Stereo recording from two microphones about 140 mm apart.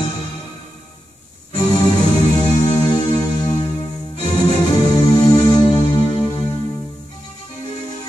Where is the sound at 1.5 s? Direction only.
30° left (ahead or behind).